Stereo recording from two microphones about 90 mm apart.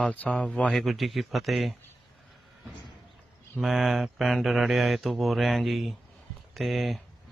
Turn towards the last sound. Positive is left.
turn(degrees=0)  # may be behind; listen again after turning